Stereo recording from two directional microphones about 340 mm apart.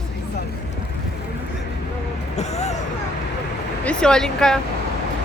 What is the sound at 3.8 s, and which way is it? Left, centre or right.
Speech, centre.